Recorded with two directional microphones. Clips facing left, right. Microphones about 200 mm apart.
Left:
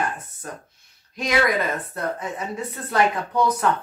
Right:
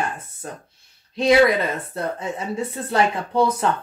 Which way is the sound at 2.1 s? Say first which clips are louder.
Right 3 dB; 30° right (ahead or behind).